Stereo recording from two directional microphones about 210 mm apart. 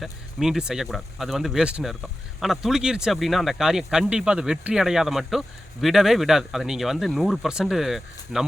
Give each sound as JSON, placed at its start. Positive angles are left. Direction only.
{"t": 0.0, "sound": "speech", "side_deg": 0}